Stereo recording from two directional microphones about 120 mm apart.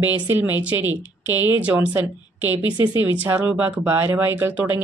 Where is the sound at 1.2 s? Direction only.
35° left (ahead or behind).